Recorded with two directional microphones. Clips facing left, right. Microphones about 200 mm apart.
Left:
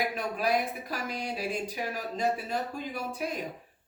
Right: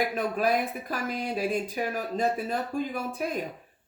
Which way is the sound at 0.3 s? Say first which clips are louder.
Right 2 dB; 50° right (ahead or behind).